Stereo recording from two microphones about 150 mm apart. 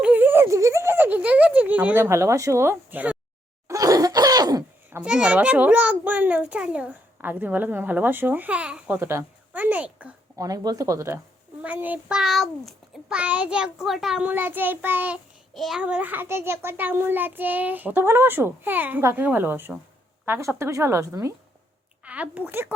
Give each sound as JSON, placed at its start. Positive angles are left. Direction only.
{"t": 0.0, "sound": "a sound", "side_deg": -10}
{"t": 3.7, "sound": "cough", "side_deg": -25}
{"t": 4.9, "sound": "a child's voice", "side_deg": -10}
{"t": 10.3, "sound": "a child's voice", "side_deg": -25}
{"t": 15.5, "sound": "a child's voice", "side_deg": 0}